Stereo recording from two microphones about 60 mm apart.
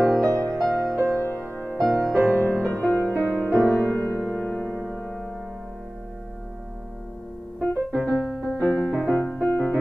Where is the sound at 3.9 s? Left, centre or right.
Left.